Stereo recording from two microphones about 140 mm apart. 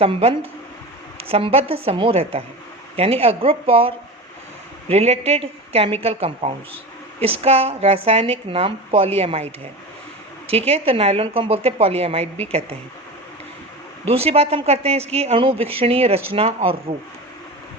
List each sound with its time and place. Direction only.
0.0 s speech: 45° right (ahead or behind)
10.5 s speech: 45° right (ahead or behind)
14.0 s speech: 45° right (ahead or behind)